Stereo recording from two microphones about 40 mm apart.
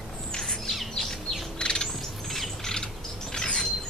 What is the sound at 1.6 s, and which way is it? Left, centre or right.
Bird, left.